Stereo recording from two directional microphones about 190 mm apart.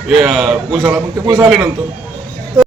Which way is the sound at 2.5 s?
20° right (ahead or behind).